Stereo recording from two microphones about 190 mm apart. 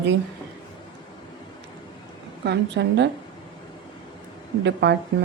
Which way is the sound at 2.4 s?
65° right (ahead or behind).